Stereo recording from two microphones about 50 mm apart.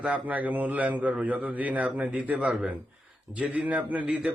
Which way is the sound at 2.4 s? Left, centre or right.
Centre.